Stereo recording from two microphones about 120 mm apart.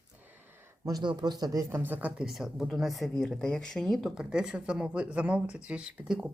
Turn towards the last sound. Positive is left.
turn(degrees=-5)  # may be behind; listen again after turning